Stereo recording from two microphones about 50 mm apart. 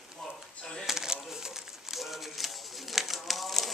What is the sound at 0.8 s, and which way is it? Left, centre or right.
Crumpling, centre.